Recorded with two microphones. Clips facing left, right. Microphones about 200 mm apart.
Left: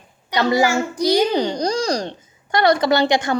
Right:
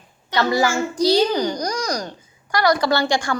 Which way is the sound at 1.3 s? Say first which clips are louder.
Left 3 dB; 25° left (ahead or behind).